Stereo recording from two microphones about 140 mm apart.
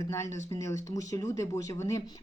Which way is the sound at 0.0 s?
20° left (ahead or behind).